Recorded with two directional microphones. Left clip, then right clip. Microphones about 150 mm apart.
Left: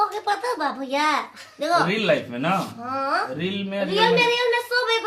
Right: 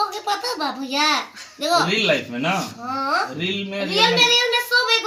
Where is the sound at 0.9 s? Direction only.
45° left (ahead or behind).